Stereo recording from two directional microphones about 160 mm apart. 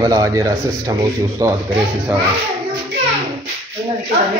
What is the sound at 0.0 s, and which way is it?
Speech, 20° right (ahead or behind).